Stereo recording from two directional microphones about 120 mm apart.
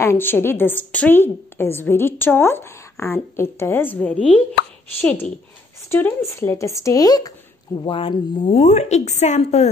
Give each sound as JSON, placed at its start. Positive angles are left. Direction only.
{"t": 0.0, "sound": "a woman's voice", "side_deg": 20}
{"t": 5.9, "sound": "speech", "side_deg": 15}
{"t": 7.8, "sound": "speech", "side_deg": 45}
{"t": 8.5, "sound": "a woman's voice", "side_deg": 65}